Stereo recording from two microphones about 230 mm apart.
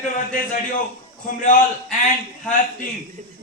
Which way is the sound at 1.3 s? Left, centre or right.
Left.